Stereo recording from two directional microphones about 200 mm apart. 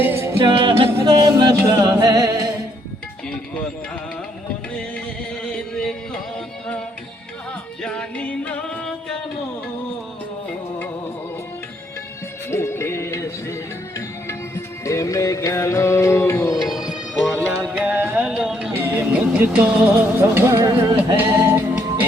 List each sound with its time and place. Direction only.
0.0 s a capella: 10° right (ahead or behind)
0.3 s a capella: 25° right (ahead or behind)
1.0 s music: 20° right (ahead or behind)
5.4 s chant: 5° left (ahead or behind)
7.8 s music: 5° left (ahead or behind)
12.5 s music: 10° left (ahead or behind)
16.6 s music: centre (ahead or behind)